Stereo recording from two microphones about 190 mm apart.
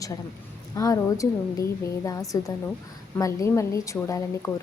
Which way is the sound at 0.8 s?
15° left (ahead or behind).